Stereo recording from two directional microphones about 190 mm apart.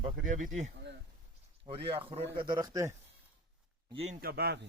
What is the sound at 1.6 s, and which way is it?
A man's voice, 25° right (ahead or behind).